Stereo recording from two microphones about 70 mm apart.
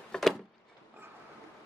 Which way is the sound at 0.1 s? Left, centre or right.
Centre.